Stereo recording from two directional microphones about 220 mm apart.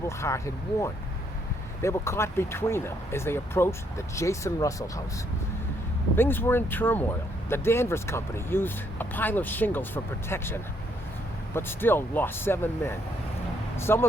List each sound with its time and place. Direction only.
0.2 s speech: 15° left (ahead or behind)
6.1 s speech: 10° left (ahead or behind)